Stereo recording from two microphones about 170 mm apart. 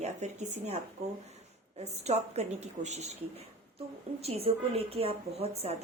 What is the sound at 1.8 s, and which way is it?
A woman's voice, 40° right (ahead or behind).